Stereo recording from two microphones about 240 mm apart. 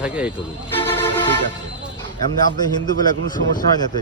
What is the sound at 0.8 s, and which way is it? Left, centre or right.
Vehicle, centre.